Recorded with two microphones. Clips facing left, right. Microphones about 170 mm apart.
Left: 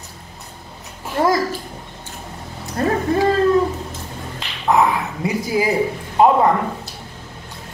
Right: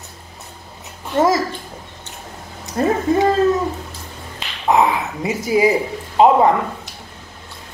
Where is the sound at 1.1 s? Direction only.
25° right (ahead or behind).